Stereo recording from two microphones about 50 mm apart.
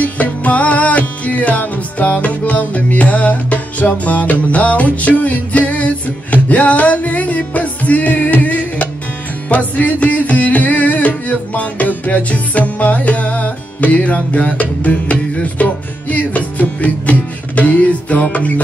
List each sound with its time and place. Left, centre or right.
0.0 s music: left